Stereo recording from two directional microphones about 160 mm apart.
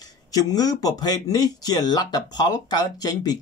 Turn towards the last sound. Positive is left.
turn(degrees=25)  # may be behind; listen again after turning